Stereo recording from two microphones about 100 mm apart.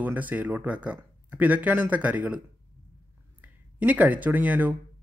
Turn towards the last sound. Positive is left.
turn(degrees=-15)  # may be behind; listen again after turning